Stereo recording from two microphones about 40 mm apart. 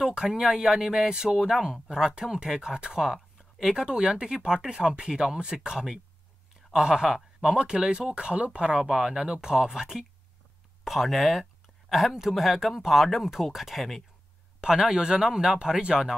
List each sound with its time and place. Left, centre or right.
0.0 s speech: centre
3.7 s speech: right